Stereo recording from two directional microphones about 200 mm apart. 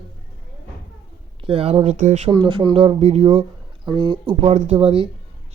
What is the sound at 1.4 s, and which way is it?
Speech, 30° right (ahead or behind).